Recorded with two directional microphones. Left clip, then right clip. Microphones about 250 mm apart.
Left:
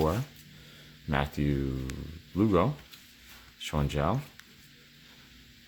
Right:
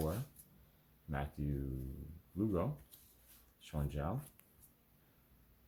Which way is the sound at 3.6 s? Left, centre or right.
Left.